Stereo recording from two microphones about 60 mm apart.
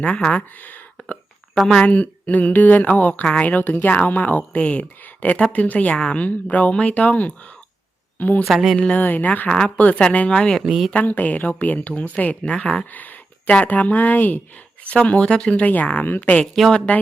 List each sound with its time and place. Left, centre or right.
0.0 s speech: centre
1.8 s speech: left
8.4 s speech: centre
8.8 s speech: left
9.5 s speech: centre
10.7 s speech: centre
10.9 s speech: left
12.5 s speech: centre
12.9 s a sound: left
13.7 s speech: left
16.0 s a woman's voice: left
16.7 s speech: left